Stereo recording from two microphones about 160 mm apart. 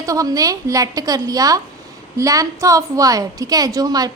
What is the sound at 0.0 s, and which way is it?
A woman's voice, 20° right (ahead or behind).